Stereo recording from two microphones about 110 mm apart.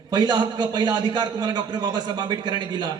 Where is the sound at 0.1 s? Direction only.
45° right (ahead or behind).